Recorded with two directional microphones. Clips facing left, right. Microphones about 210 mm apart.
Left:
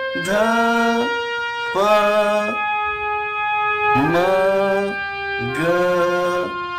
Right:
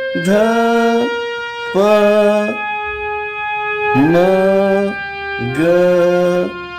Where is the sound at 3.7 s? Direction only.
20° right (ahead or behind).